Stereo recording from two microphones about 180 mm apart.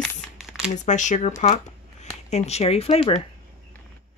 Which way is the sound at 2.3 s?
35° left (ahead or behind).